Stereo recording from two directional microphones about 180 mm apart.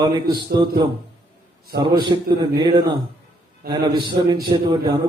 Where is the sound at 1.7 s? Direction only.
25° right (ahead or behind).